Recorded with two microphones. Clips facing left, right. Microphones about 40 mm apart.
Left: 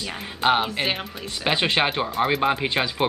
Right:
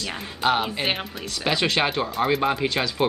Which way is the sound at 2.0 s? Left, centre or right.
Centre.